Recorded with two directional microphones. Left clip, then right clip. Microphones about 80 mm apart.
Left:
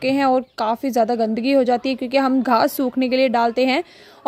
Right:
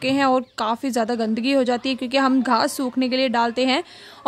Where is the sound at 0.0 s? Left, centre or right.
Left.